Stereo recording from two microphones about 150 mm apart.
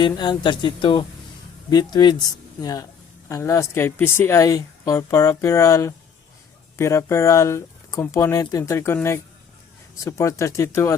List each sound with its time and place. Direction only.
0.0 s speech: 30° left (ahead or behind)